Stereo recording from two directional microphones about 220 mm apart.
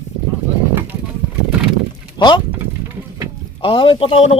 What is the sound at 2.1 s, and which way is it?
Speech, 20° left (ahead or behind).